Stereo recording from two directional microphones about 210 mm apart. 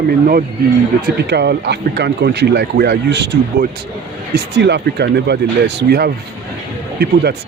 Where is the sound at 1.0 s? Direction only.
50° right (ahead or behind).